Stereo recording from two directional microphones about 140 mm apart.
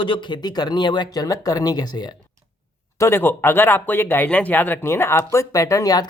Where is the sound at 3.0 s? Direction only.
15° left (ahead or behind).